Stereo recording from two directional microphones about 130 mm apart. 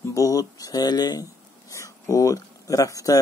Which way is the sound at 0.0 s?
25° left (ahead or behind).